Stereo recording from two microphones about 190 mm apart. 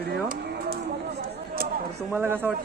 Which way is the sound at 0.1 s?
55° right (ahead or behind).